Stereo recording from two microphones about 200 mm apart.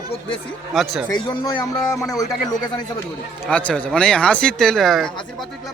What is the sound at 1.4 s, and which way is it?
Speech, 20° left (ahead or behind).